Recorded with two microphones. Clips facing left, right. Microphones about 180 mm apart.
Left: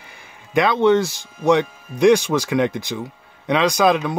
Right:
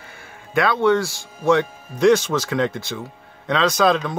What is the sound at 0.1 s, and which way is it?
Speech, 15° left (ahead or behind).